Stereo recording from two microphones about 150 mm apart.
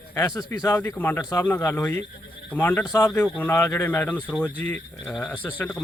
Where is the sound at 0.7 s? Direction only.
10° left (ahead or behind).